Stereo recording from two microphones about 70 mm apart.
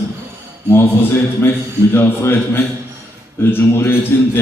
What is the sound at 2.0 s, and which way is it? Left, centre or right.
A man's voice, left.